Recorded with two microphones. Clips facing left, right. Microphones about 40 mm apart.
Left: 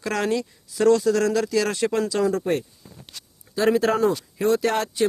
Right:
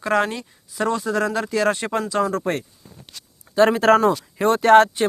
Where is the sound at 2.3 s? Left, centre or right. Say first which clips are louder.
Even; right.